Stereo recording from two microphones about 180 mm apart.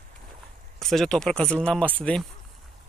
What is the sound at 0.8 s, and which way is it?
Speech, centre (ahead or behind).